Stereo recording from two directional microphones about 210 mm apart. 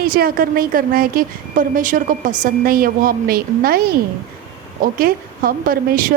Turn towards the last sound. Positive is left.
turn(degrees=-40)  # may be behind; listen again after turning